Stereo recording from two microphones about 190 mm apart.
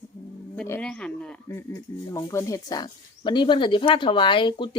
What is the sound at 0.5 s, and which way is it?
Speech, 10° left (ahead or behind).